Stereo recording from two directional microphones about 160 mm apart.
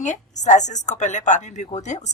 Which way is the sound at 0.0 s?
50° left (ahead or behind).